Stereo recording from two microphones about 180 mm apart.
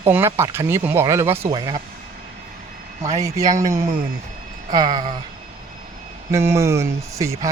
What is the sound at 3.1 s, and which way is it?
Speech, 20° right (ahead or behind).